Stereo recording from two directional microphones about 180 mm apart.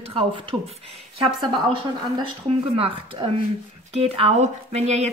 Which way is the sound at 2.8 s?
30° right (ahead or behind).